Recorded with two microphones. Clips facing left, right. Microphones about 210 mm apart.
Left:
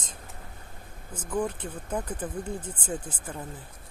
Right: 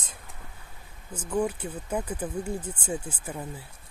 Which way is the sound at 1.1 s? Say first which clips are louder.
Right 2 dB; 10° right (ahead or behind).